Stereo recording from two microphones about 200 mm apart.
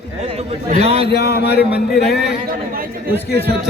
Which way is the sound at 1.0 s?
55° left (ahead or behind).